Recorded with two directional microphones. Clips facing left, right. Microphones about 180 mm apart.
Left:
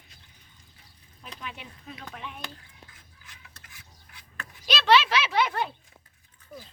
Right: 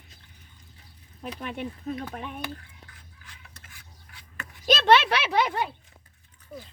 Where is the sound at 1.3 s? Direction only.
50° right (ahead or behind).